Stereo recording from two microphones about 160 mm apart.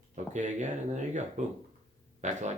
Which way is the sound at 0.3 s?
50° right (ahead or behind).